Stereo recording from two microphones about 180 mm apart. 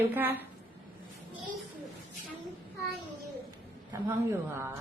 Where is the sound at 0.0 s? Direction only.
10° right (ahead or behind).